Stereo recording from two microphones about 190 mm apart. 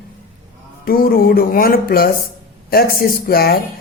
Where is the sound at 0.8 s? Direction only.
50° left (ahead or behind).